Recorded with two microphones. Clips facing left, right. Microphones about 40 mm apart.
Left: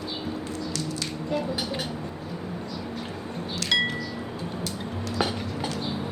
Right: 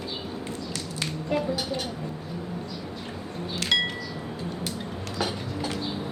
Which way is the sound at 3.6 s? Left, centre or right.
Right.